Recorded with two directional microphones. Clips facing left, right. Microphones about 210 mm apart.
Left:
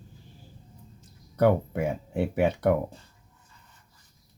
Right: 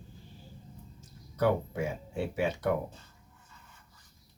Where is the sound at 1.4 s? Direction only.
60° left (ahead or behind).